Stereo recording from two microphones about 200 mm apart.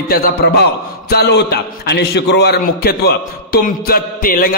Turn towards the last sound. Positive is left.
turn(degrees=45)  # may be behind; listen again after turning